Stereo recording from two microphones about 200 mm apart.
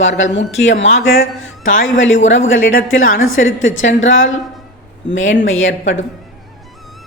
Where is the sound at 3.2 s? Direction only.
80° left.